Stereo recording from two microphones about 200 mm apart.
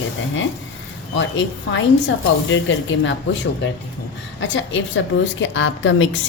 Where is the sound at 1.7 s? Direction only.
70° left (ahead or behind).